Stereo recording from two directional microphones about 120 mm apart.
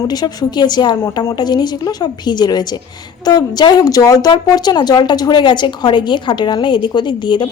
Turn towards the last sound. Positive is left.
turn(degrees=40)  # may be behind; listen again after turning